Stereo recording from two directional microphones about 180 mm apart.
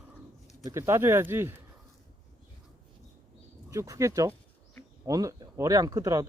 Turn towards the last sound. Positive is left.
turn(degrees=-20)  # may be behind; listen again after turning